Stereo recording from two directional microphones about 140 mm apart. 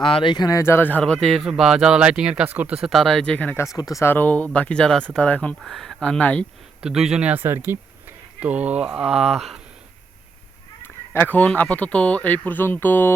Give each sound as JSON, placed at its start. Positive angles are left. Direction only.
{"t": 0.0, "sound": "speech", "side_deg": 35}
{"t": 3.8, "sound": "speech", "side_deg": 25}
{"t": 6.8, "sound": "speech", "side_deg": -5}
{"t": 10.8, "sound": "speech", "side_deg": 15}